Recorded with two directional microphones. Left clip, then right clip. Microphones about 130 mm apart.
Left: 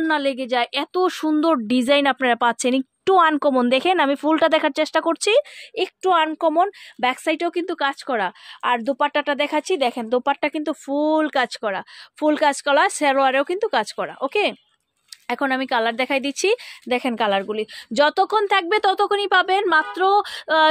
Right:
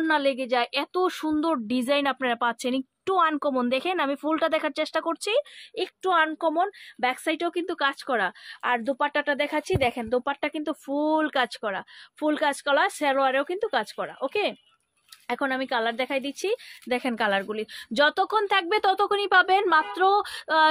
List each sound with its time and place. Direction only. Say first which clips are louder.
0.0 s a woman's voice: left 3 dB; 30° left (ahead or behind); by 5.9 s 50° left (ahead or behind)
6.0 s a woman's voice: left 5 dB; 35° left (ahead or behind); by 16.6 s 60° left (ahead or behind)
16.8 s a woman's voice: left 4 dB; 40° left (ahead or behind)